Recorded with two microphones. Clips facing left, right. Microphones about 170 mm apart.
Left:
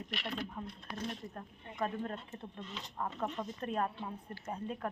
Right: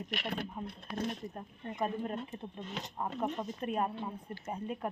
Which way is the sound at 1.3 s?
20° right (ahead or behind).